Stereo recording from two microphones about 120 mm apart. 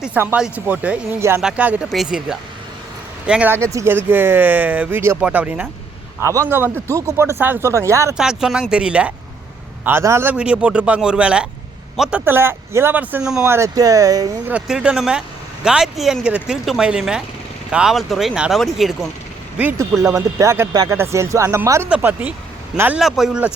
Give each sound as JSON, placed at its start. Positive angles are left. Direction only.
{"t": 0.3, "sound": "speech", "side_deg": -10}
{"t": 3.5, "sound": "speech", "side_deg": -25}
{"t": 6.2, "sound": "speech", "side_deg": -25}
{"t": 8.1, "sound": "speech", "side_deg": -5}
{"t": 9.8, "sound": "speech", "side_deg": -20}
{"t": 10.3, "sound": "speech", "side_deg": -10}
{"t": 12.2, "sound": "speech", "side_deg": -20}
{"t": 13.4, "sound": "speech", "side_deg": -25}
{"t": 14.4, "sound": "speech", "side_deg": -10}
{"t": 20.0, "sound": "speech", "side_deg": -25}
{"t": 21.8, "sound": "speech", "side_deg": -10}